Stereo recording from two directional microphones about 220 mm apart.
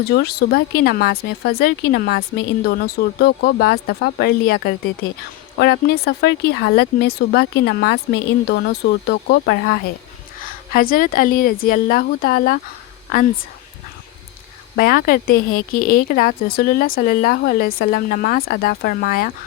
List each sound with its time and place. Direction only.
0.0 s speech: 45° left (ahead or behind)
10.4 s speech: 40° left (ahead or behind)
14.8 s speech: 40° left (ahead or behind)